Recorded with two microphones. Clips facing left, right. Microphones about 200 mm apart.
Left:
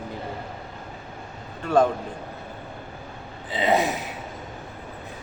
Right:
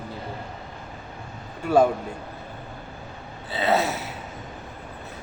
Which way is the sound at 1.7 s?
10° right (ahead or behind).